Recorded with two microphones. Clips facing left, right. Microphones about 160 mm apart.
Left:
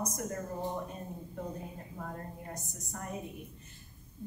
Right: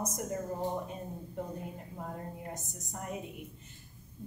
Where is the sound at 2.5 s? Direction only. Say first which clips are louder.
Even; 20° right (ahead or behind).